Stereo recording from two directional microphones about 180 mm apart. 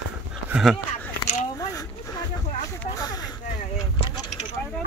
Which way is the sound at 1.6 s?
20° left (ahead or behind).